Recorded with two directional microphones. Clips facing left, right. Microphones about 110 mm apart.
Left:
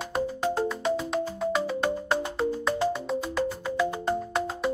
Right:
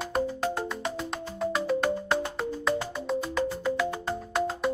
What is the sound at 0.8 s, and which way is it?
Music, centre (ahead or behind).